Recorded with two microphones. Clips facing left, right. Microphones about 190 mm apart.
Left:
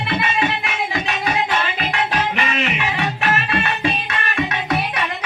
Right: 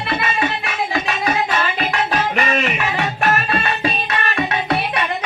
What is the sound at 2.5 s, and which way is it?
Music, 45° right (ahead or behind).